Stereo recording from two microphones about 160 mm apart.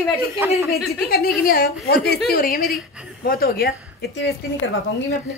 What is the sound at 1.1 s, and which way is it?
A woman's voice, 70° left (ahead or behind).